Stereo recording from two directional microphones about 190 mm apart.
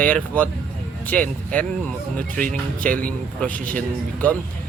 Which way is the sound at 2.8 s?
45° right (ahead or behind).